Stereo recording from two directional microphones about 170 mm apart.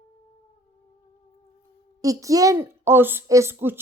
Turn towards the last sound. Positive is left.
turn(degrees=-15)  # may be behind; listen again after turning